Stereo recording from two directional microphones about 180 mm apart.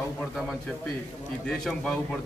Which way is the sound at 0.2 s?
Centre (ahead or behind).